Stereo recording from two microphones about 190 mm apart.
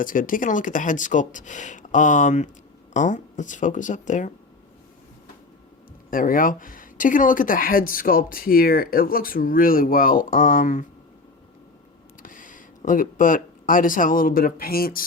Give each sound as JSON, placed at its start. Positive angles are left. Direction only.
{"t": 0.0, "sound": "speech", "side_deg": 45}
{"t": 6.1, "sound": "speech", "side_deg": 45}
{"t": 12.2, "sound": "speech", "side_deg": 45}